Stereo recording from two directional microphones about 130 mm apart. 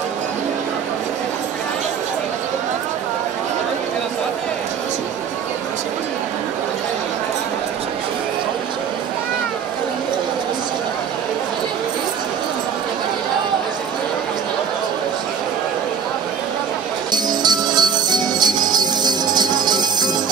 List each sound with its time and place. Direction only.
17.1 s music: 35° right (ahead or behind)